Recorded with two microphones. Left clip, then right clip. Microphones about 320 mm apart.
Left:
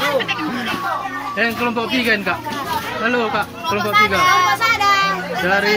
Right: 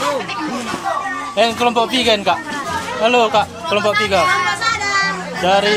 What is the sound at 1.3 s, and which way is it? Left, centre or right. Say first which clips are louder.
Speech: right 5 dB; centre.